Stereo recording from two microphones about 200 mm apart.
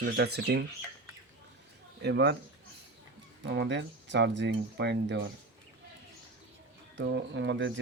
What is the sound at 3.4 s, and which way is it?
Speech, 60° right (ahead or behind).